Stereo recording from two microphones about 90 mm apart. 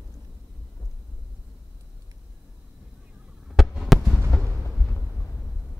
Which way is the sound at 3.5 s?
Centre (ahead or behind).